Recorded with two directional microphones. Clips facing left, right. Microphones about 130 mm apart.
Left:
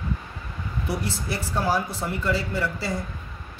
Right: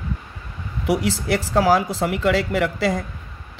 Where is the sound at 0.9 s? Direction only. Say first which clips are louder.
Right 10 dB; 90° right.